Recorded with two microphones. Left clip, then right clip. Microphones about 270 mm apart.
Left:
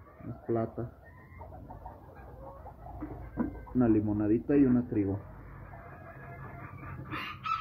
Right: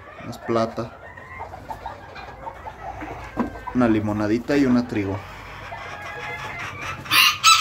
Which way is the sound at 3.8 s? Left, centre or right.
Centre.